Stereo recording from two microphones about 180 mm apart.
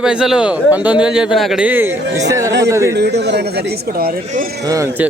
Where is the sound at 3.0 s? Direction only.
70° right (ahead or behind).